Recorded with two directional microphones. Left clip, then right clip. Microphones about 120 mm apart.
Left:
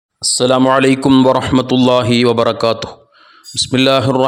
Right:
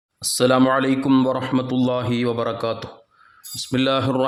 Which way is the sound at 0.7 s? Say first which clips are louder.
Left 8 dB; 90° left.